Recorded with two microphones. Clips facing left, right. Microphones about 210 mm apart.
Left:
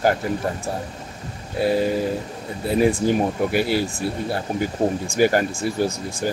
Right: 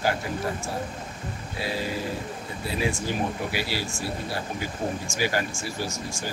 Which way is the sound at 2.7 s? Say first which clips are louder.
Left 10 dB; 50° left (ahead or behind).